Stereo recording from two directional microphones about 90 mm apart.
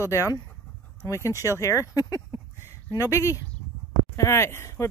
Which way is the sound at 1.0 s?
35° left (ahead or behind).